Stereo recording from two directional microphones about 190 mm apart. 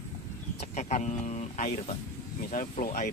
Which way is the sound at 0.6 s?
35° left (ahead or behind).